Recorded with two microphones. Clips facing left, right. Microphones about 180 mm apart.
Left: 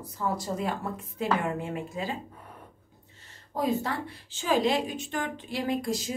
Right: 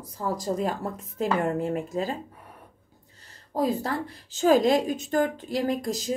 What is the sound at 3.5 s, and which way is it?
Speech, 35° right (ahead or behind).